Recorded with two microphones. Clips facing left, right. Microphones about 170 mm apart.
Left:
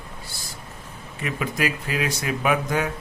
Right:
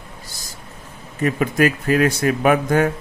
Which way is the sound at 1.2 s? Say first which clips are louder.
Right 8 dB; 45° right (ahead or behind).